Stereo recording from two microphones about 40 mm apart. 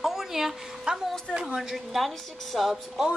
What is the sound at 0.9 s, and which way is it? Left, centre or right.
Speech, right.